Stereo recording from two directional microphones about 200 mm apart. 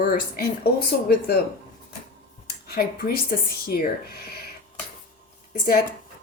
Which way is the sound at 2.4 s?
50° left (ahead or behind).